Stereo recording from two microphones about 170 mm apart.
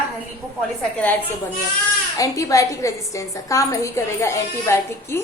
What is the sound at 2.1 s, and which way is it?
A woman's voice, 20° left (ahead or behind).